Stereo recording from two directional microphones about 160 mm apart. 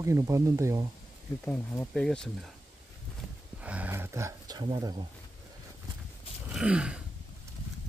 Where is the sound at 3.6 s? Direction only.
10° right (ahead or behind); by 5.1 s 30° right (ahead or behind).